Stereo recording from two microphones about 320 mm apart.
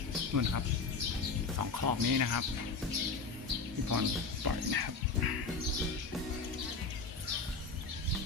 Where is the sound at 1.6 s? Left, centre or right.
Right.